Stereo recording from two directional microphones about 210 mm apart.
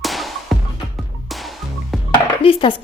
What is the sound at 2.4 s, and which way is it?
Dishes, 25° left (ahead or behind).